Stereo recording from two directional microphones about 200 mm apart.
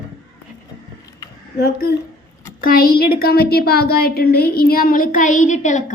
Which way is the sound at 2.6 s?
45° left (ahead or behind).